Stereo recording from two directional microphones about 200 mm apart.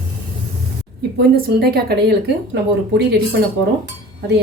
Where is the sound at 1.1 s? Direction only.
50° right (ahead or behind).